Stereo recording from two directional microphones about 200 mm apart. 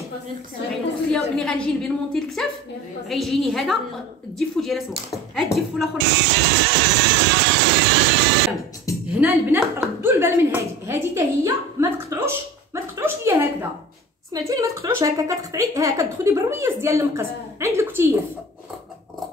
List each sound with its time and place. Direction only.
1.1 s speech: 5° left (ahead or behind)
6.2 s music: 60° right (ahead or behind)
9.1 s speech: 5° right (ahead or behind)